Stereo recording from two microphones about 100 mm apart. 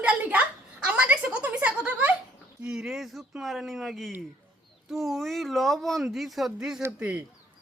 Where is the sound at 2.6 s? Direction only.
5° right (ahead or behind).